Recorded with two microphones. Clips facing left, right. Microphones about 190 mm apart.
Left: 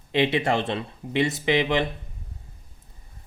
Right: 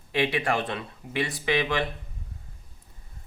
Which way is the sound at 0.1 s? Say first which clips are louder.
Left 3 dB; 20° left (ahead or behind).